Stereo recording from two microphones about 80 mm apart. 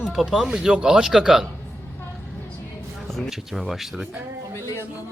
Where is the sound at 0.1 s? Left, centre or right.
Centre.